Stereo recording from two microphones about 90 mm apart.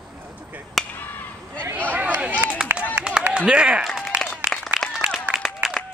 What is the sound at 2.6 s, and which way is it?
Run, 10° right (ahead or behind).